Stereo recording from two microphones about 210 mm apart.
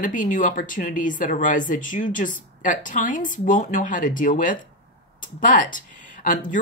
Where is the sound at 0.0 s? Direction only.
40° left (ahead or behind).